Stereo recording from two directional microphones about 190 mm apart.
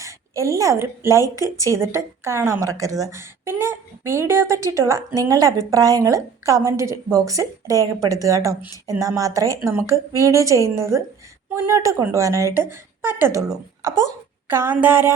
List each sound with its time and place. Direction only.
0.0 s a woman's voice: 15° right (ahead or behind)